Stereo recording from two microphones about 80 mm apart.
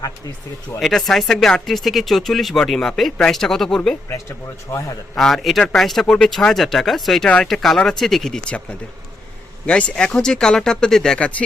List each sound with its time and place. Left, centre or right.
0.8 s speech: centre
4.7 s a man's voice: left
5.1 s speech: centre
9.6 s speech: centre